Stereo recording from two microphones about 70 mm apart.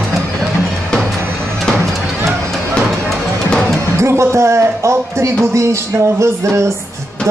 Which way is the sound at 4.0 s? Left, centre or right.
Right.